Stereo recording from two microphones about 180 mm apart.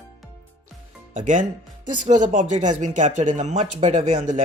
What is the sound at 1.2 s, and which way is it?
Speech, 45° right (ahead or behind).